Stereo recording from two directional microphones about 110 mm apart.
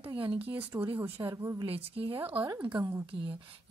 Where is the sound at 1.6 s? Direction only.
60° right (ahead or behind).